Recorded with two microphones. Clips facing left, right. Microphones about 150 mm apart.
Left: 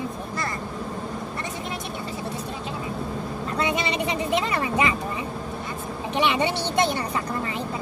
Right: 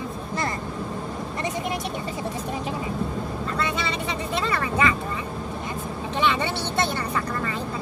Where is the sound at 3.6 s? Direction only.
20° left (ahead or behind).